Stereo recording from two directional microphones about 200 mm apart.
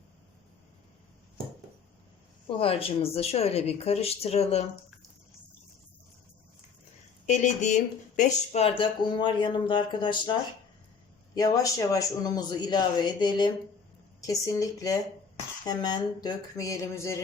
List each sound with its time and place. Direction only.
2.6 s speech: 30° left (ahead or behind)
7.3 s speech: 35° left (ahead or behind)
11.3 s speech: 15° left (ahead or behind)